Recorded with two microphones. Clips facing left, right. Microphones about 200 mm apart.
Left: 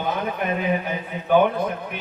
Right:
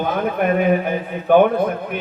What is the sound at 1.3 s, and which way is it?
Speech, 55° right (ahead or behind).